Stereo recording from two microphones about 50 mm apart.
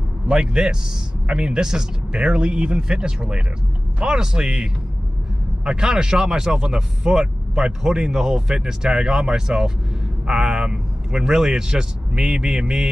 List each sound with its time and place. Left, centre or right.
0.3 s speech: centre
5.7 s a man's voice: centre